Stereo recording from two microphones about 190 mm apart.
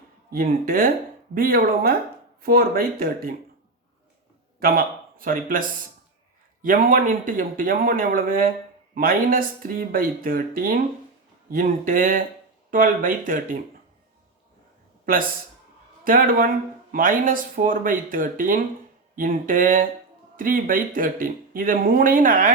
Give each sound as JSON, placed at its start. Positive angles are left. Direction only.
{"t": 0.3, "sound": "speech", "side_deg": -50}
{"t": 4.6, "sound": "speech", "side_deg": -50}
{"t": 16.0, "sound": "speech", "side_deg": -50}